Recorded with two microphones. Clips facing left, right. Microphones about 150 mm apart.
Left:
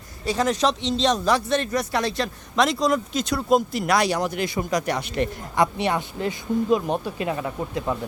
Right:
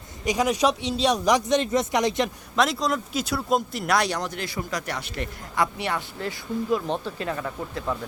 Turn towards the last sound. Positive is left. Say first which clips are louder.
# left 3 dB
turn(degrees=20)  # may be behind; listen again after turning